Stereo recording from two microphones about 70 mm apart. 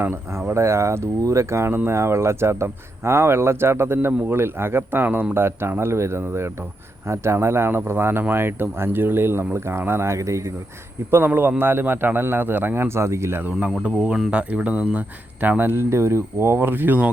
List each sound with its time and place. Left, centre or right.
0.0 s speech: right
0.5 s a man's voice: right
11.1 s a man's voice: right
13.8 s speech: centre